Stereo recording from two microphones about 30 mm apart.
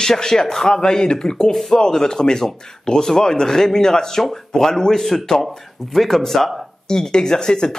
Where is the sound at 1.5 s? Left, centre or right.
Centre.